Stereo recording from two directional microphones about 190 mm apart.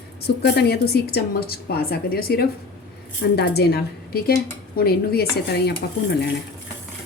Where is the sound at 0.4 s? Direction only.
60° left (ahead or behind).